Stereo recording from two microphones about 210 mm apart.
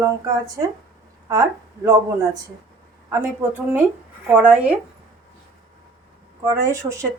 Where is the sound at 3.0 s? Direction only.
10° right (ahead or behind).